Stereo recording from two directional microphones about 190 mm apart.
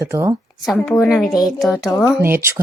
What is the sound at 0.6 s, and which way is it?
Speech, centre (ahead or behind).